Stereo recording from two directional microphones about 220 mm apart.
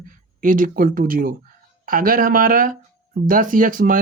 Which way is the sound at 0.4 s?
40° right (ahead or behind).